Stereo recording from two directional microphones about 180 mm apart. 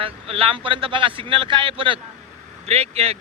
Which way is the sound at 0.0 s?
30° right (ahead or behind).